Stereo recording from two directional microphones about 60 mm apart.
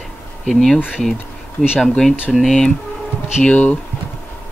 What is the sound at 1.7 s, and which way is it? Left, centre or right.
Speech, centre.